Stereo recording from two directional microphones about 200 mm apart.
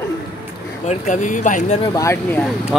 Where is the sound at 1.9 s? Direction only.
15° left (ahead or behind).